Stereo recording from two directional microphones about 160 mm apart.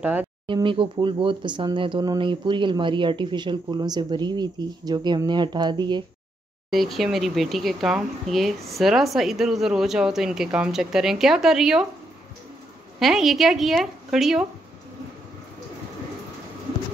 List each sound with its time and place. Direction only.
0.0 s speech: 10° right (ahead or behind)
0.5 s speech: 30° right (ahead or behind)
6.7 s speech: centre (ahead or behind)
13.0 s speech: centre (ahead or behind)